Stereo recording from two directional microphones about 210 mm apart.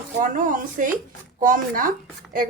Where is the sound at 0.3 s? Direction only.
40° right (ahead or behind).